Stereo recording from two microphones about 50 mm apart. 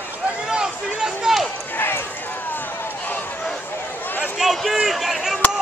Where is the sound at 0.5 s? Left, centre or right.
Centre.